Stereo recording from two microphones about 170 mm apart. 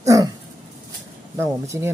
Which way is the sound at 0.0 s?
20° right (ahead or behind).